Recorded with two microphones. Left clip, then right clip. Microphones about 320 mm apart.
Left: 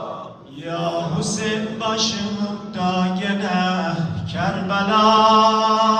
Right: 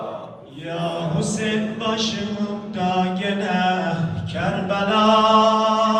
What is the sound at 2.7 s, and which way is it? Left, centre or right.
Mantra, centre.